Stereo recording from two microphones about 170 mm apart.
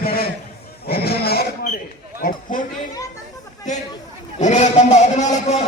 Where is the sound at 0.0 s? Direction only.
60° left (ahead or behind).